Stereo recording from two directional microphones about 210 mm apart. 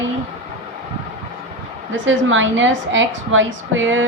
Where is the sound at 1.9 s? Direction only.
65° right (ahead or behind).